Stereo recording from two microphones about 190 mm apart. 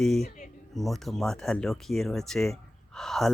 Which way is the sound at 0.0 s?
Centre (ahead or behind).